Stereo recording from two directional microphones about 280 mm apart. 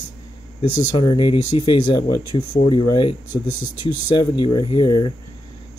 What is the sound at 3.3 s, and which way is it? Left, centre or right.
Speech, left.